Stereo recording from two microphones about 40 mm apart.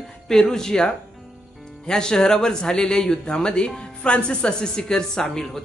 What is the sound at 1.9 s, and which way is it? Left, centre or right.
Speech, centre.